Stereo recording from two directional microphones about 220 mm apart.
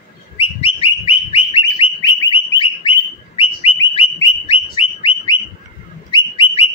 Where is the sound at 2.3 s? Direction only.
25° left (ahead or behind).